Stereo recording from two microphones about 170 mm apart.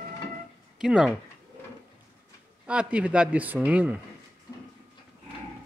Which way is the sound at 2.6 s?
5° right (ahead or behind).